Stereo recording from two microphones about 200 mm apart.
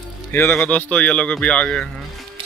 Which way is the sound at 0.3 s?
10° left (ahead or behind).